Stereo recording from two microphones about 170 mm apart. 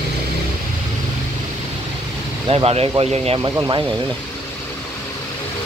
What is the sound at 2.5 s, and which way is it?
Speech, 35° right (ahead or behind).